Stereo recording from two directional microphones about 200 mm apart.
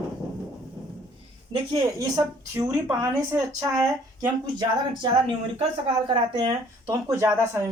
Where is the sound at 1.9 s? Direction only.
15° right (ahead or behind).